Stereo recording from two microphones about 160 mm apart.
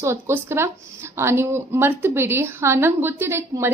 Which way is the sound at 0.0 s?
15° right (ahead or behind).